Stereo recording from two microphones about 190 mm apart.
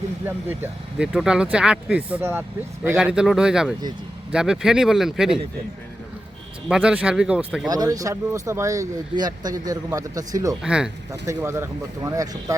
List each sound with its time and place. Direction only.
0.3 s speech: 10° right (ahead or behind)
6.7 s speech: 5° right (ahead or behind)
7.7 s speech: 20° right (ahead or behind)
10.6 s speech: 5° right (ahead or behind)
11.1 s speech: 15° right (ahead or behind)